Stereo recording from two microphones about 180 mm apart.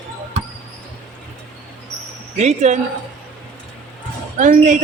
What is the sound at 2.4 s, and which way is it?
Speech, 40° right (ahead or behind).